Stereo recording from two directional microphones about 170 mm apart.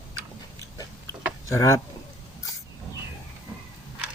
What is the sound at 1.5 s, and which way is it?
Speech, 15° left (ahead or behind).